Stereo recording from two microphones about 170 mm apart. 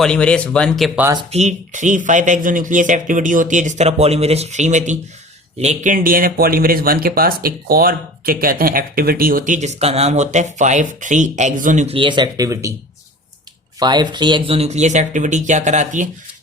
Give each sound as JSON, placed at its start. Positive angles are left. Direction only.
{"t": 0.0, "sound": "speech", "side_deg": 5}
{"t": 1.3, "sound": "speech", "side_deg": -45}
{"t": 11.9, "sound": "speech", "side_deg": -30}
{"t": 13.7, "sound": "speech", "side_deg": -25}